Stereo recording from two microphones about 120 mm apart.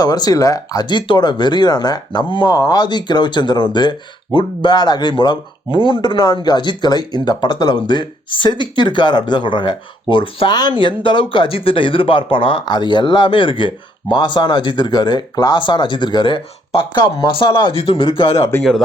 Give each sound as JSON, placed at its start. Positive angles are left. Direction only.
{"t": 0.0, "sound": "speech", "side_deg": 30}
{"t": 18.3, "sound": "speech", "side_deg": 25}